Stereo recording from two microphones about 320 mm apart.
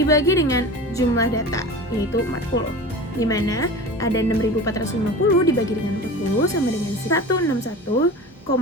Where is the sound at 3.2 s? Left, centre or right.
Centre.